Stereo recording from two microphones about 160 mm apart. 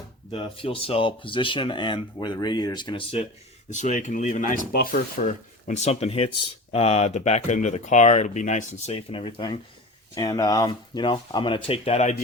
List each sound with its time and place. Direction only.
0.3 s speech: 35° left (ahead or behind)
3.7 s speech: 50° left (ahead or behind)
5.2 s speech: 50° left (ahead or behind)